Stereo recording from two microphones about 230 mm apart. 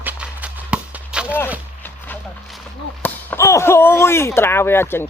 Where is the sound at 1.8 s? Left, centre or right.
Centre.